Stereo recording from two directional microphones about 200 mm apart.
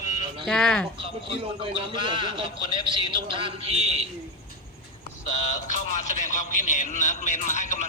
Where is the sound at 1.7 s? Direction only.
25° right (ahead or behind).